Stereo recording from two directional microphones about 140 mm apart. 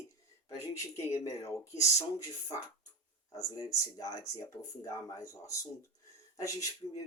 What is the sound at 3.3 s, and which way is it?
Speech, 25° left (ahead or behind).